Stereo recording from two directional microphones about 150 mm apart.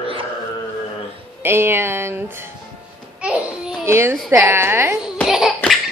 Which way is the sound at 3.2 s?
5° right (ahead or behind).